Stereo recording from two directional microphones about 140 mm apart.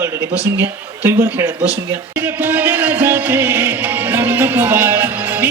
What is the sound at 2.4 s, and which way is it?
Music, 15° right (ahead or behind).